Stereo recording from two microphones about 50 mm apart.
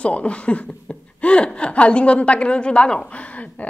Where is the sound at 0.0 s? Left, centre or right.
Left.